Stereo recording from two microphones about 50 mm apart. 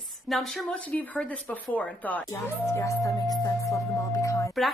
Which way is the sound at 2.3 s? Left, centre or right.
Left.